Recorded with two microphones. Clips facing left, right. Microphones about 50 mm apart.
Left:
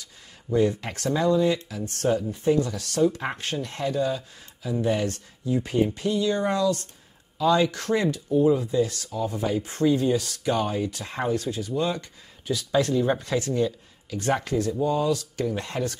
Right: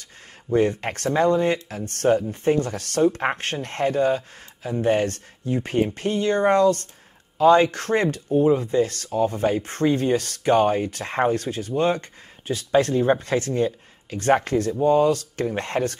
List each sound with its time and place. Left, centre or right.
0.0 s speech: right